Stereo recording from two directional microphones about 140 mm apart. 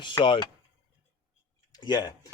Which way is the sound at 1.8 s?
30° left (ahead or behind).